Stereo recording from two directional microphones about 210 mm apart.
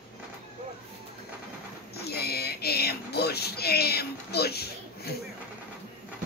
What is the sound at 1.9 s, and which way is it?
Speech, 50° left (ahead or behind).